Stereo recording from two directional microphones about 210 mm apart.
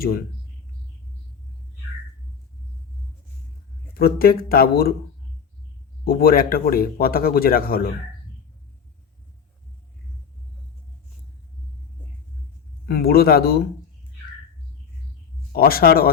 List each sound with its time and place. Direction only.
3.9 s speech: 45° left (ahead or behind)
6.1 s speech: 45° left (ahead or behind)
12.8 s speech: 45° left (ahead or behind)
15.5 s speech: 45° left (ahead or behind)